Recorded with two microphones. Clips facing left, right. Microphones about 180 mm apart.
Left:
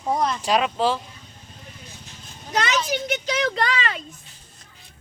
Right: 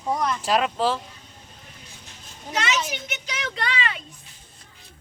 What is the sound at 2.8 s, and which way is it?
Speech, 35° left (ahead or behind).